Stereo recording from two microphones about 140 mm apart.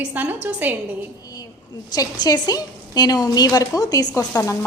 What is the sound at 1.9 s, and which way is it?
A woman's voice, 30° left (ahead or behind).